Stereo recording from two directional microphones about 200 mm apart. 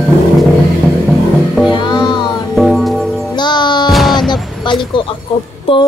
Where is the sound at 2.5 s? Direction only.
Centre (ahead or behind).